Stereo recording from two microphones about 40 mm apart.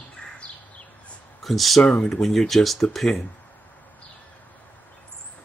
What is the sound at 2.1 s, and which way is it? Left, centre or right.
Speech, centre.